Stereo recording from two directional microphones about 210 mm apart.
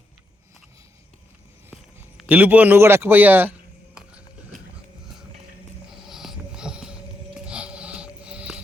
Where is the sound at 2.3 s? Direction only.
5° right (ahead or behind).